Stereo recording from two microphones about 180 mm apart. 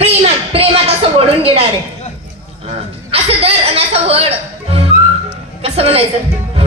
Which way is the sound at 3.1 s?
35° right (ahead or behind).